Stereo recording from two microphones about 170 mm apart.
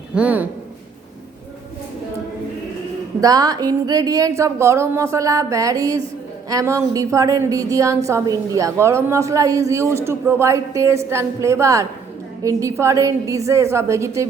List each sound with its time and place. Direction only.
0.1 s a woman's voice: 10° right (ahead or behind)
3.2 s a woman's voice: 20° right (ahead or behind)